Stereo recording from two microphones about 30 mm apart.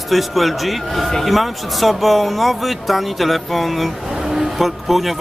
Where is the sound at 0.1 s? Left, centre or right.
Centre.